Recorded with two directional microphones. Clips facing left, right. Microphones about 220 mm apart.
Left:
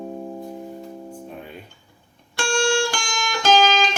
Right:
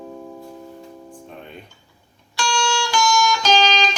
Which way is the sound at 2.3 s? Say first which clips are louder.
Left 3 dB; 55° left (ahead or behind).